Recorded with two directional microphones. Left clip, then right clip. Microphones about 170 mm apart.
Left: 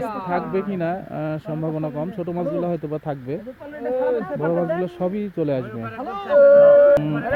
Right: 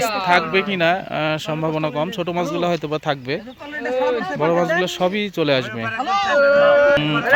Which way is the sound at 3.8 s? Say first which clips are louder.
Right 2 dB; 55° left (ahead or behind).